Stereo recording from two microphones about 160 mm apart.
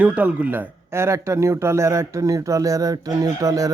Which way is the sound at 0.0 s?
10° right (ahead or behind).